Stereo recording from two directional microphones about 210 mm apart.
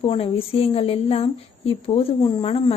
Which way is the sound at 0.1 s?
25° left (ahead or behind).